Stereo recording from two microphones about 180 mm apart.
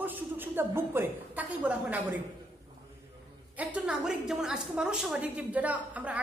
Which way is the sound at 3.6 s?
10° right (ahead or behind).